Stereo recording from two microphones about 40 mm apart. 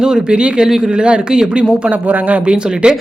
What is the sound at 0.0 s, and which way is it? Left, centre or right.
Speech, centre.